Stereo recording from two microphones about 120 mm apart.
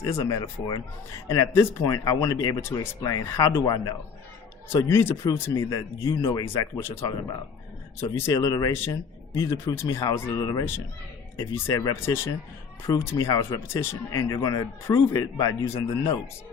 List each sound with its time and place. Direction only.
0.0 s speech: 30° left (ahead or behind)
8.2 s speech: 30° left (ahead or behind)